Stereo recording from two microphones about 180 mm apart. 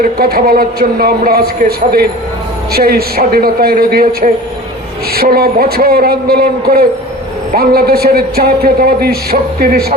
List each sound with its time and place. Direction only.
0.0 s a man's voice: 55° right (ahead or behind)